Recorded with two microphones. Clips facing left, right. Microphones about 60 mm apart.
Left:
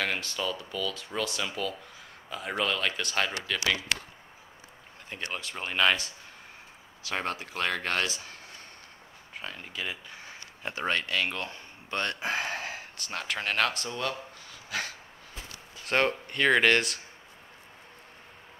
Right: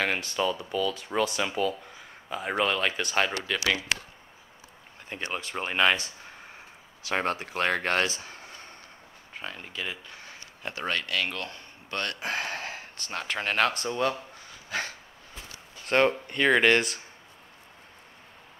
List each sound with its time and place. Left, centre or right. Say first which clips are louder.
0.3 s speech: right 5 dB; centre
5.1 s speech: right 3 dB; centre
7.5 s speech: right 3 dB; right
8.2 s a sound: right 2 dB; centre
9.3 s speech: right 1 dB; centre
14.7 s dog: right 2 dB; centre
15.8 s speech: right 3 dB; centre